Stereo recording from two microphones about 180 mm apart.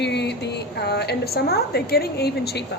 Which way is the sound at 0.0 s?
70° left (ahead or behind).